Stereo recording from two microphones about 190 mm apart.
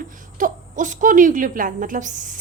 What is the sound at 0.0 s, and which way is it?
A woman's voice, 45° right (ahead or behind).